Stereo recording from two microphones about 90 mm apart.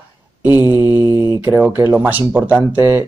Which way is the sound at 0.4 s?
20° right (ahead or behind).